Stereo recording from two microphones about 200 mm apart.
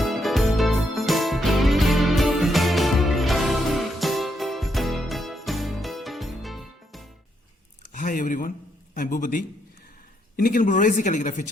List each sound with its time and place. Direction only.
0.0 s music: centre (ahead or behind)
7.9 s a sound: 40° left (ahead or behind)
9.0 s a man's voice: 40° left (ahead or behind)